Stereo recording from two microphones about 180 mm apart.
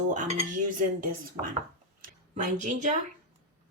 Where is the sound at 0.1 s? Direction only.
40° right (ahead or behind).